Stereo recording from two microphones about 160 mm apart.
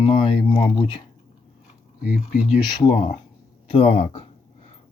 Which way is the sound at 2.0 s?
65° left (ahead or behind).